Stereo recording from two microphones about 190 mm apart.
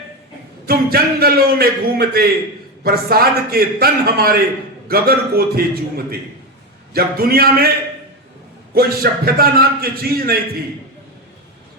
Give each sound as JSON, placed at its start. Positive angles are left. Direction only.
{"t": 0.7, "sound": "a man's voice", "side_deg": -55}
{"t": 8.7, "sound": "a man's voice", "side_deg": -55}